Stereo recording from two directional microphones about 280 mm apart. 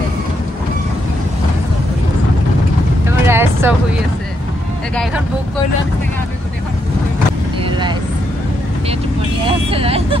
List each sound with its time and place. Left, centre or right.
3.3 s vehicle: centre
9.7 s speech: centre